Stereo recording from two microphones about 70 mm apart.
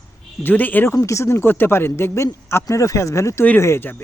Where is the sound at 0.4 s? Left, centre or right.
Left.